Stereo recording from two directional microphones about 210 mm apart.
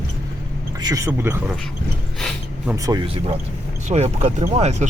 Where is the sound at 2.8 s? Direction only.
20° right (ahead or behind).